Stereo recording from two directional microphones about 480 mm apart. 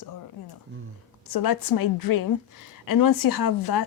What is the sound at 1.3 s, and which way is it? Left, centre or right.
A woman's voice, left.